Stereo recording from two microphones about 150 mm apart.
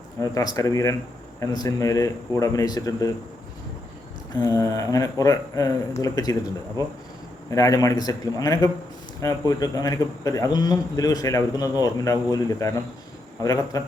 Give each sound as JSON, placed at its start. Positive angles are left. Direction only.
{"t": 0.2, "sound": "a man's voice", "side_deg": 20}
{"t": 4.4, "sound": "a man's voice", "side_deg": 25}
{"t": 7.5, "sound": "a man's voice", "side_deg": 25}